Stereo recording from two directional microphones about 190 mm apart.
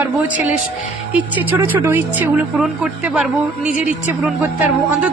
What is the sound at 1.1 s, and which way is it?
Speech, 10° right (ahead or behind).